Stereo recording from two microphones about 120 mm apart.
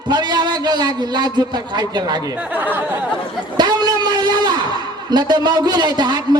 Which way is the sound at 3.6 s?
35° right (ahead or behind).